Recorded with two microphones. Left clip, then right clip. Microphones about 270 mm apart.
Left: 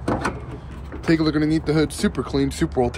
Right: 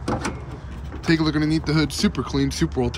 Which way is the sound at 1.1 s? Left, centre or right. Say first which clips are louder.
Left 1 dB; centre.